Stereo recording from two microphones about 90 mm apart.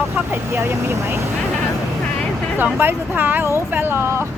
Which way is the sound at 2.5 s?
25° right (ahead or behind).